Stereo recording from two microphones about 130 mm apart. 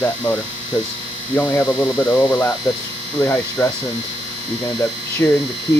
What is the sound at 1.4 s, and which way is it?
Speech, 10° left (ahead or behind).